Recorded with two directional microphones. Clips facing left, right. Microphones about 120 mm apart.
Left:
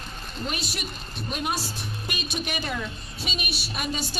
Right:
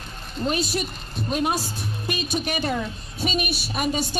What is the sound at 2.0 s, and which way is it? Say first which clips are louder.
A woman's voice: right 6 dB; 35° right (ahead or behind).